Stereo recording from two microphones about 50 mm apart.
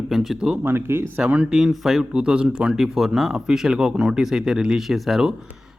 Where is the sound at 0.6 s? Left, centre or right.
Right.